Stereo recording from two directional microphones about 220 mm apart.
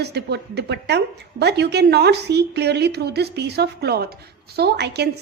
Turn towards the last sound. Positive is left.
turn(degrees=-50)  # may be behind; listen again after turning